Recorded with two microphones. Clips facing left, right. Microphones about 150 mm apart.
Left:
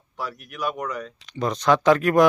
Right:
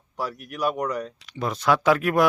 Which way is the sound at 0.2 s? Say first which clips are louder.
Right 2 dB; 40° right (ahead or behind).